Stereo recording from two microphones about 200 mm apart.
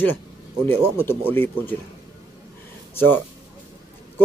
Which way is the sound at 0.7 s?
10° left (ahead or behind).